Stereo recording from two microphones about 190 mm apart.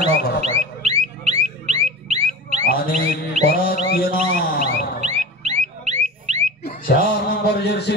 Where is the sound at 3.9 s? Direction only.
50° left (ahead or behind).